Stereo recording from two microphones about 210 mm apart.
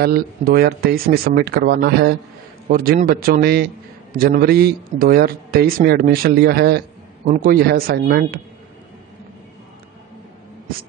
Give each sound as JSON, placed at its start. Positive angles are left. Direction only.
{"t": 0.0, "sound": "a man's voice", "side_deg": -50}